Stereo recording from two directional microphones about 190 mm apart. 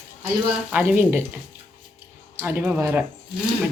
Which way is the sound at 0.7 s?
10° right (ahead or behind).